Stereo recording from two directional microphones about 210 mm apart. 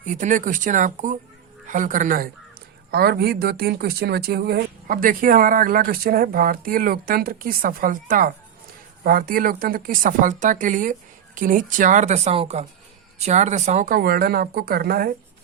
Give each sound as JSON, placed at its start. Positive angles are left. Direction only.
{"t": 0.0, "sound": "a woman's voice", "side_deg": -35}